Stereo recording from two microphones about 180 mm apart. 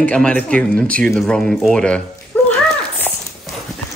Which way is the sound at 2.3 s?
10° left (ahead or behind).